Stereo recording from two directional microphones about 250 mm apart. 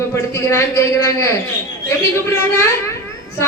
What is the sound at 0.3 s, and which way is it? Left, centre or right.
A woman's voice, centre.